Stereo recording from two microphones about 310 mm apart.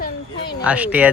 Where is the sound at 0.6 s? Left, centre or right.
Centre.